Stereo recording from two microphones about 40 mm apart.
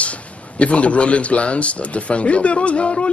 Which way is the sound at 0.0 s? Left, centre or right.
Left.